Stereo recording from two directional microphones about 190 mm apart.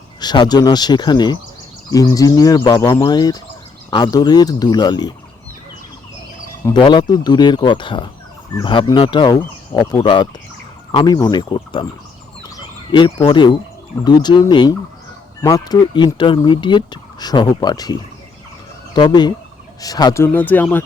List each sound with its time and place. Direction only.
0.2 s speech: 20° left (ahead or behind)
6.7 s speech: 25° left (ahead or behind)
12.9 s speech: 20° left (ahead or behind)